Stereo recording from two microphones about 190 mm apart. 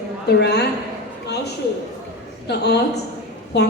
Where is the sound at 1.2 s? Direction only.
60° left (ahead or behind).